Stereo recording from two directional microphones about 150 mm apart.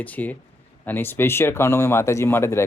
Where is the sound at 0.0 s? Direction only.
10° left (ahead or behind).